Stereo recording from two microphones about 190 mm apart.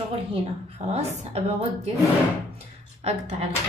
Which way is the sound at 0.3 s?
35° right (ahead or behind).